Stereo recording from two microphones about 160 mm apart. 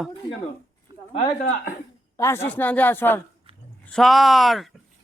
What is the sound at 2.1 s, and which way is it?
Speech, 15° left (ahead or behind).